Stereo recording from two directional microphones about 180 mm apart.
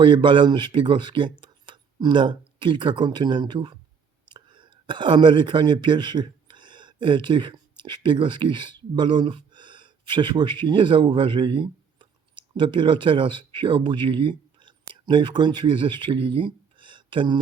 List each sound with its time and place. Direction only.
0.0 s speech: 25° right (ahead or behind)